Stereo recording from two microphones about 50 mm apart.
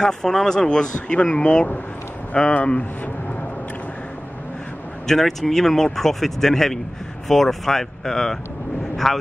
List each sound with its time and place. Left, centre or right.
0.0 s speech: centre
5.0 s speech: centre